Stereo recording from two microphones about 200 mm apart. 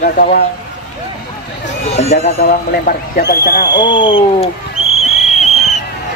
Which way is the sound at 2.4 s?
45° left (ahead or behind).